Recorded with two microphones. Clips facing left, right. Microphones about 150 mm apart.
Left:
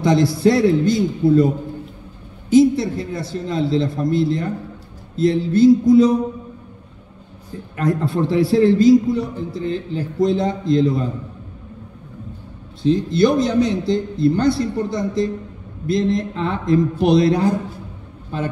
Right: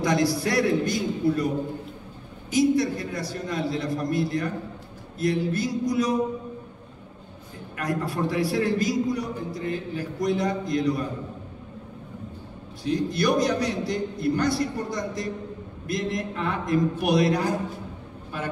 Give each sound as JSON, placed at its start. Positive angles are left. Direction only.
{"t": 0.0, "sound": "a man's voice", "side_deg": 25}
{"t": 2.5, "sound": "a man's voice", "side_deg": 25}
{"t": 7.7, "sound": "a man's voice", "side_deg": 25}
{"t": 12.8, "sound": "a man's voice", "side_deg": 25}